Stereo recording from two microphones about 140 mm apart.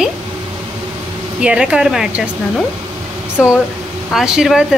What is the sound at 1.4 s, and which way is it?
Speech, 5° right (ahead or behind).